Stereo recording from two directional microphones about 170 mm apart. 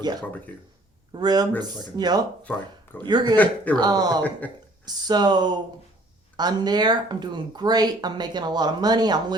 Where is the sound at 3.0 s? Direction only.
25° right (ahead or behind).